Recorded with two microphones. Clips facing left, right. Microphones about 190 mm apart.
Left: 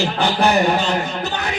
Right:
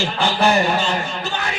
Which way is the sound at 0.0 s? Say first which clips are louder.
Left 1 dB; 15° left (ahead or behind).